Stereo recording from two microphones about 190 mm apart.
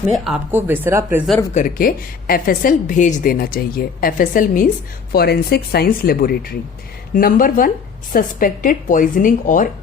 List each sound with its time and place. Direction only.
0.5 s speech: 10° right (ahead or behind)
1.5 s a woman's voice: 45° left (ahead or behind)
5.1 s a woman's voice: 55° left (ahead or behind)